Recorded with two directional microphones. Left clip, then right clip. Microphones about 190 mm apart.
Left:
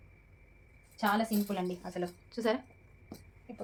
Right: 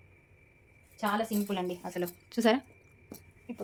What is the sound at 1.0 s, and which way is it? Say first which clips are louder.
A woman's voice: even; 35° right (ahead or behind).